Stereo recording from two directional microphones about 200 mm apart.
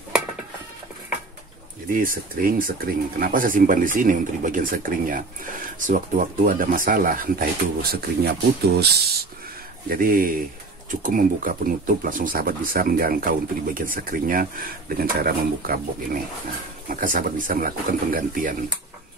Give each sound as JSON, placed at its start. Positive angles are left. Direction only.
{"t": 1.9, "sound": "speech", "side_deg": -45}